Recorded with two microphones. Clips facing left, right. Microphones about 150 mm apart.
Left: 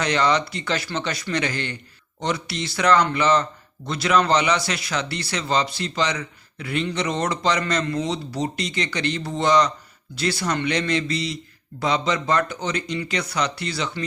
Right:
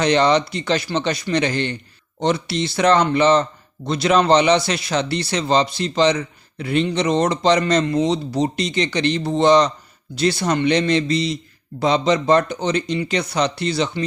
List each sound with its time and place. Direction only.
0.0 s speech: 25° right (ahead or behind)